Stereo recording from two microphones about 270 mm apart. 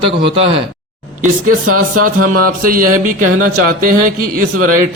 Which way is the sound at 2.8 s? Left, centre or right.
Right.